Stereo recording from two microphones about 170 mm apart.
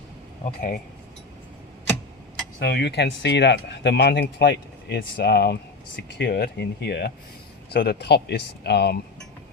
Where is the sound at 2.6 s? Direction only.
75° left (ahead or behind).